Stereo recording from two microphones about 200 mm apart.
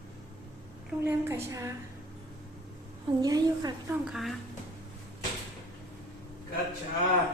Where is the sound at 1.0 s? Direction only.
15° right (ahead or behind).